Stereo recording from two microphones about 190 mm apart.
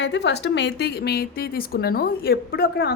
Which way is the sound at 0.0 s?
65° left (ahead or behind).